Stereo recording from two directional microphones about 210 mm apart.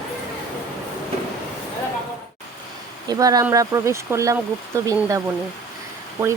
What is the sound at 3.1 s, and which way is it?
Speech, 15° right (ahead or behind).